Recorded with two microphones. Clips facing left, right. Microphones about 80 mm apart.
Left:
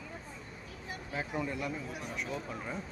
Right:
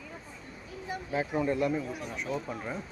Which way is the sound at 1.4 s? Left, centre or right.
Right.